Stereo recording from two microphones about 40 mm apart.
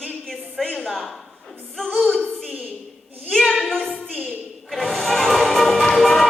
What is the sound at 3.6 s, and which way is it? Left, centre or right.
Speech, centre.